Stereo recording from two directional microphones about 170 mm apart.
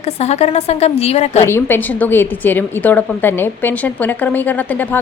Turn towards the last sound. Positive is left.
turn(degrees=10)  # may be behind; listen again after turning